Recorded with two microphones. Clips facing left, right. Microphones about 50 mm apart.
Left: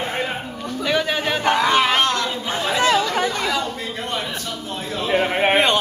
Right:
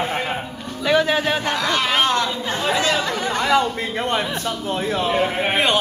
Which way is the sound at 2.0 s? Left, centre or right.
Centre.